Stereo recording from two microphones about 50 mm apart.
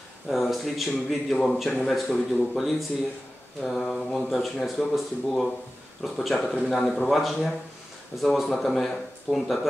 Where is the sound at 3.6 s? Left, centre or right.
Centre.